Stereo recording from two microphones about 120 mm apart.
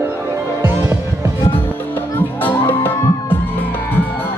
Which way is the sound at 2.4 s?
15° left (ahead or behind).